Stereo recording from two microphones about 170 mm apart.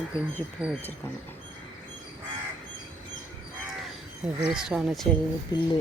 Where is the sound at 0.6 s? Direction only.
5° right (ahead or behind).